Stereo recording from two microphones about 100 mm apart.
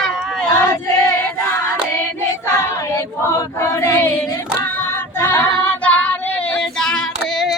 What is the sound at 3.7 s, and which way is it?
Choir, 30° left (ahead or behind).